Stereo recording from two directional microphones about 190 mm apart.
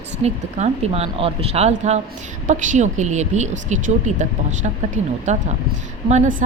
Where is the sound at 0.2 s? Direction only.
35° right (ahead or behind).